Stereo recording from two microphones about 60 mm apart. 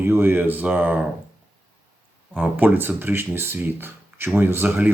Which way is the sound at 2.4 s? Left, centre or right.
Right.